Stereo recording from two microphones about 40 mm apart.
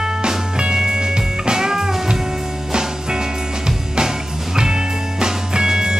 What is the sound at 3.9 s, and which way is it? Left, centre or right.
Music, centre.